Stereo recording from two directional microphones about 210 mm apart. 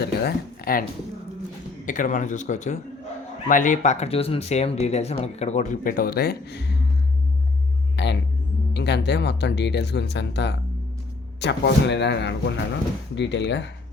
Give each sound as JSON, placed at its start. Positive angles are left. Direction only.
{"t": 0.0, "sound": "speech", "side_deg": 45}
{"t": 7.9, "sound": "speech", "side_deg": 55}